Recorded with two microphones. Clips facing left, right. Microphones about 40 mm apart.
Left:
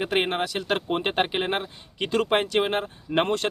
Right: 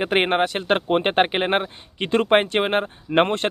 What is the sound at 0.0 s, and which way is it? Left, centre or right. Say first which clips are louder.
Speech: right 5 dB; right.